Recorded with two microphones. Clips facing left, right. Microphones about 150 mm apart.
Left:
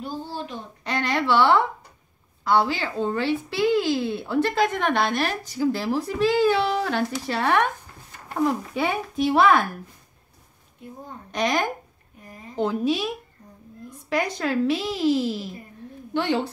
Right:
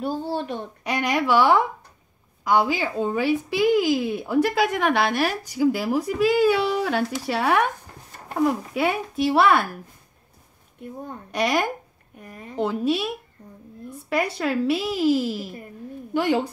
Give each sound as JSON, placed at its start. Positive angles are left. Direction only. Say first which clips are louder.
{"t": 0.0, "sound": "a child's voice", "louder": "right 6 dB", "side_deg": -60}
{"t": 0.8, "sound": "speech", "louder": "right 1 dB", "side_deg": -10}
{"t": 11.3, "sound": "speech", "louder": "right 1 dB", "side_deg": -5}
{"t": 12.2, "sound": "a child's voice", "louder": "right 3 dB", "side_deg": -65}
{"t": 12.5, "sound": "speech", "louder": "even", "side_deg": 0}